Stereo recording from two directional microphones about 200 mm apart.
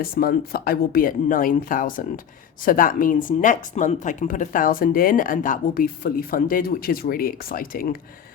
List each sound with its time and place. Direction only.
0.0 s speech: 50° left (ahead or behind)